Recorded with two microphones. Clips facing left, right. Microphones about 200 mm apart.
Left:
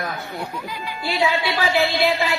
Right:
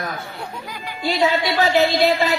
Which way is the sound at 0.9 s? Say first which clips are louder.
Right 3 dB; 40° right (ahead or behind).